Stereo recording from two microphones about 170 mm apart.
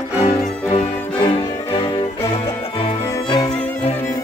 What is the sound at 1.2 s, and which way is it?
Music, 30° left (ahead or behind).